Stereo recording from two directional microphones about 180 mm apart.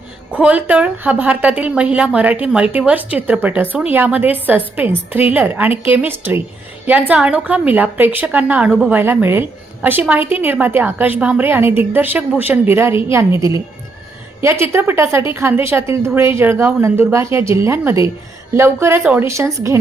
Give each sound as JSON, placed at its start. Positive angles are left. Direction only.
{"t": 0.3, "sound": "a woman's voice", "side_deg": -10}